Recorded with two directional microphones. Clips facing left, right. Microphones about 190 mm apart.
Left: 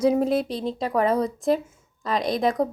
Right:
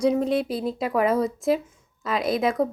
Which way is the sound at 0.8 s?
35° left (ahead or behind).